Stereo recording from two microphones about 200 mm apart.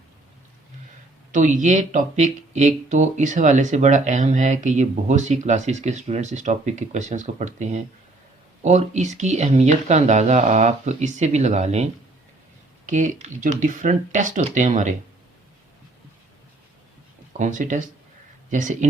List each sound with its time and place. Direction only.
1.3 s speech: 40° right (ahead or behind)
17.3 s speech: 40° right (ahead or behind)